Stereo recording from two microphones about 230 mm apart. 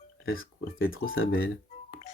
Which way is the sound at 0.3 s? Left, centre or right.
Left.